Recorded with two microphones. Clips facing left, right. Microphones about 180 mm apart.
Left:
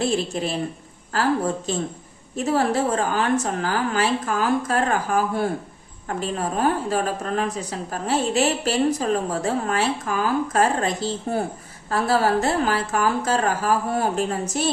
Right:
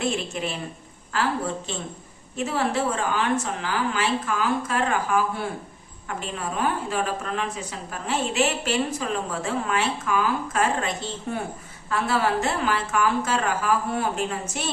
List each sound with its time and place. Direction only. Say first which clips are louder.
0.0 s a woman's voice: left 4 dB; 35° left (ahead or behind)